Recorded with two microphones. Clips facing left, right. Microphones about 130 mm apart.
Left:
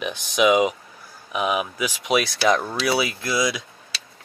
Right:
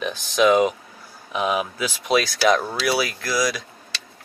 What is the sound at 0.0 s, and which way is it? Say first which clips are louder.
Speech: right 1 dB; 10° left (ahead or behind).